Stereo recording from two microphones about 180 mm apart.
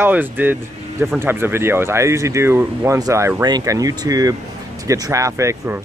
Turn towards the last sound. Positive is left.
turn(degrees=-15)  # may be behind; listen again after turning